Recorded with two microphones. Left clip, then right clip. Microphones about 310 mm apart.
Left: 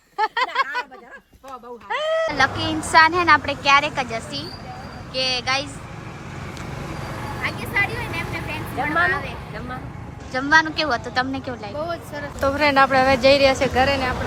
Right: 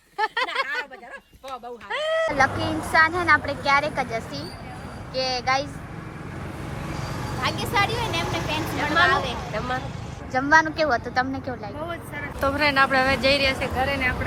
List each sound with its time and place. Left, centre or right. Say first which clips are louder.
0.2 s a sound: left 3 dB; centre
1.9 s speech: left 2 dB; centre
7.4 s vehicle: even; centre
9.0 s speech: right 2 dB; centre
13.7 s speech: left 6 dB; left